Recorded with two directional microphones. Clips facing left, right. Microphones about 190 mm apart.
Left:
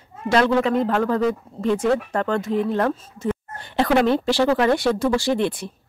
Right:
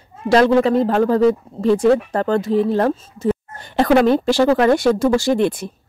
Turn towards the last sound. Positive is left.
turn(degrees=-45)  # may be behind; listen again after turning